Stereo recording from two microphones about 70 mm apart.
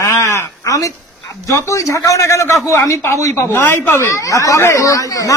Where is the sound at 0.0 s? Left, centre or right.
Left.